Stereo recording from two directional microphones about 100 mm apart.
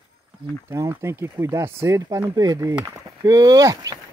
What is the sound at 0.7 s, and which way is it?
Speech, 25° right (ahead or behind).